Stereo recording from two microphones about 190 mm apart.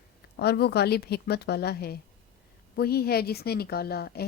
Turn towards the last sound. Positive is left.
turn(degrees=55)  # may be behind; listen again after turning